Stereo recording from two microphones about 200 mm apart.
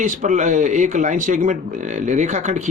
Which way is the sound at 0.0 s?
40° right (ahead or behind).